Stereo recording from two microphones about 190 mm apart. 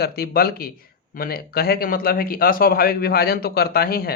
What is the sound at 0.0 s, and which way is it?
Speech, 55° left (ahead or behind).